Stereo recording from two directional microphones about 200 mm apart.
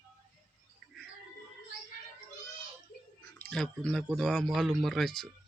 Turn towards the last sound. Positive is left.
turn(degrees=0)  # may be behind; listen again after turning